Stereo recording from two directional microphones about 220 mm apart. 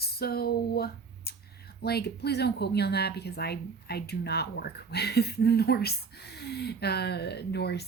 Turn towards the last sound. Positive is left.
turn(degrees=50)  # may be behind; listen again after turning